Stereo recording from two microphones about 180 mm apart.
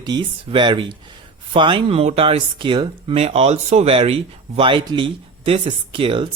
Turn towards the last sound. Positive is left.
turn(degrees=-30)  # may be behind; listen again after turning